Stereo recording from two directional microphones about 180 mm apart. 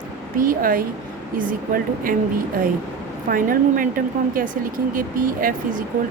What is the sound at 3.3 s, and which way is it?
Speech, 50° right (ahead or behind).